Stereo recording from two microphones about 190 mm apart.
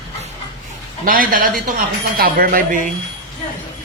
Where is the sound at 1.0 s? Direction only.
50° right (ahead or behind).